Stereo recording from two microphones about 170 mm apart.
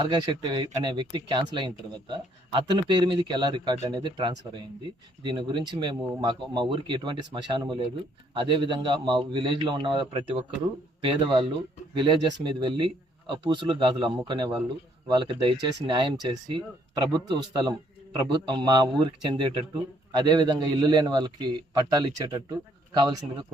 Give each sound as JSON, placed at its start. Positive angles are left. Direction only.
{"t": 0.0, "sound": "speech", "side_deg": -25}